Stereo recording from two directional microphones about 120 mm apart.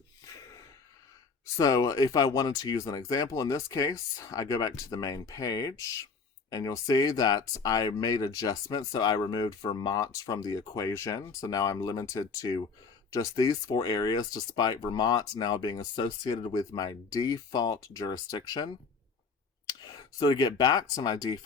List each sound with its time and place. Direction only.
1.5 s speech: 30° left (ahead or behind)
19.8 s speech: 35° left (ahead or behind)